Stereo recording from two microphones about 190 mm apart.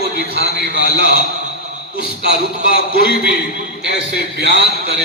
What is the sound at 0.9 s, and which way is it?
A man's voice, 60° right (ahead or behind).